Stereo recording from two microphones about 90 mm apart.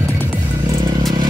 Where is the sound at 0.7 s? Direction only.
50° right (ahead or behind).